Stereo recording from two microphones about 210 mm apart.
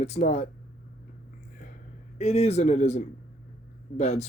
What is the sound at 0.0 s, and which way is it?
Speech, 30° left (ahead or behind).